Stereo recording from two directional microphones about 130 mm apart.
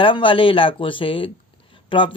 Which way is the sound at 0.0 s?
40° left (ahead or behind).